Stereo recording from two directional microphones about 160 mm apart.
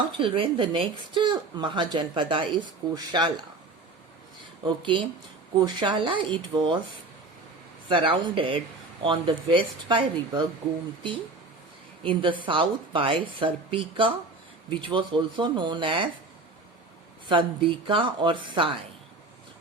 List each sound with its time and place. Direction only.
0.2 s speech: 35° right (ahead or behind)
4.6 s speech: 30° right (ahead or behind)
7.9 s speech: 30° right (ahead or behind)
12.0 s speech: 30° right (ahead or behind)
17.2 s speech: 30° right (ahead or behind)